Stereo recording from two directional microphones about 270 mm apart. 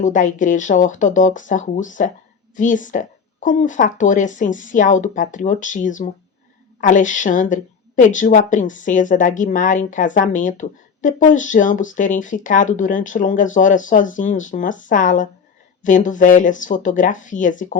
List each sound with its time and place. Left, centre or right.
0.0 s a woman's voice: left